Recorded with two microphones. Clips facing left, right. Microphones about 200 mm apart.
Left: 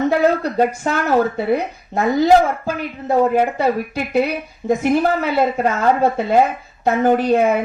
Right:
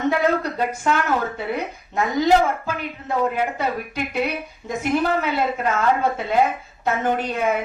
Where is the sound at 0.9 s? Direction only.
40° left (ahead or behind).